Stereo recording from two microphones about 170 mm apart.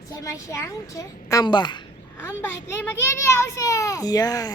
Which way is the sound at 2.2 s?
15° left (ahead or behind).